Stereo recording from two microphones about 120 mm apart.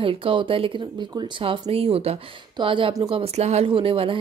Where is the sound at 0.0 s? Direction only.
50° right (ahead or behind).